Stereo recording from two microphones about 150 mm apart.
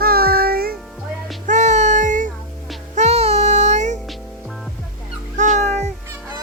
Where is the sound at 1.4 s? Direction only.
50° right (ahead or behind).